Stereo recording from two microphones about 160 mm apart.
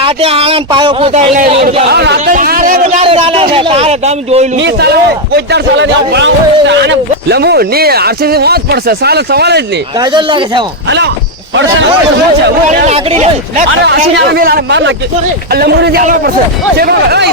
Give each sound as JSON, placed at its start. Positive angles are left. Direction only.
{"t": 0.0, "sound": "a man's voice", "side_deg": -35}
{"t": 1.1, "sound": "speech", "side_deg": -45}
{"t": 1.9, "sound": "speech", "side_deg": -85}
{"t": 2.3, "sound": "a sound", "side_deg": -60}
{"t": 3.0, "sound": "a man's voice", "side_deg": -35}
{"t": 4.6, "sound": "a man's voice", "side_deg": -90}
{"t": 6.7, "sound": "speech", "side_deg": -90}
{"t": 10.0, "sound": "speech", "side_deg": -30}
{"t": 10.8, "sound": "a man's voice", "side_deg": -90}
{"t": 12.9, "sound": "speech", "side_deg": -45}
{"t": 14.2, "sound": "a man's voice", "side_deg": -80}